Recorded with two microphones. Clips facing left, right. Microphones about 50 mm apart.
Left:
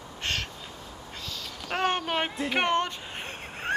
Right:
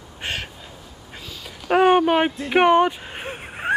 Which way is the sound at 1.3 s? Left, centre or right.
Centre.